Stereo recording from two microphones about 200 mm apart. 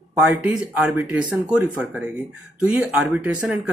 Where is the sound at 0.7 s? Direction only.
5° right (ahead or behind).